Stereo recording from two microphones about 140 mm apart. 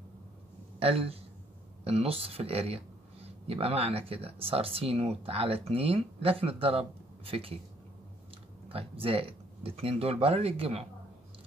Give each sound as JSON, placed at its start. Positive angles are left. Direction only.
{"t": 0.7, "sound": "a man's voice", "side_deg": -45}